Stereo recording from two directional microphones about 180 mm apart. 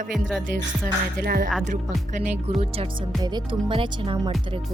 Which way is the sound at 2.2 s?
40° right (ahead or behind).